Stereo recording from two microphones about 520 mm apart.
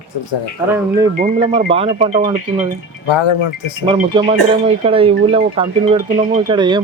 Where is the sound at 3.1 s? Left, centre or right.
Left.